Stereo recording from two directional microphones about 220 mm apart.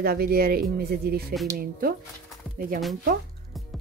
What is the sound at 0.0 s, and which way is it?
Speech, 45° right (ahead or behind).